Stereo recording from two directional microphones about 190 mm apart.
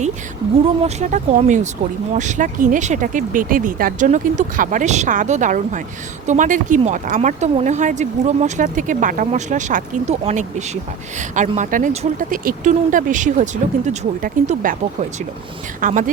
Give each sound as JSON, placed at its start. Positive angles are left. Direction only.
{"t": 0.8, "sound": "speech", "side_deg": -35}
{"t": 15.8, "sound": "speech", "side_deg": -40}